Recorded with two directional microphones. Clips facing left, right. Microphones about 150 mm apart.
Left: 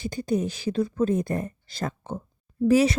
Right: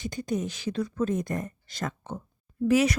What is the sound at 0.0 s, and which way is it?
A woman's voice, 30° left (ahead or behind).